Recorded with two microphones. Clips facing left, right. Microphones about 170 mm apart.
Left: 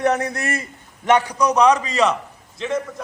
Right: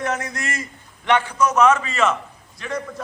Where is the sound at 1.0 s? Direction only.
40° left (ahead or behind).